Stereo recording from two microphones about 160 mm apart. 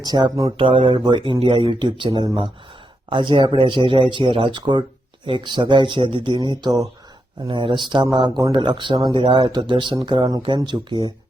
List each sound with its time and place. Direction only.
0.0 s speech: 25° right (ahead or behind)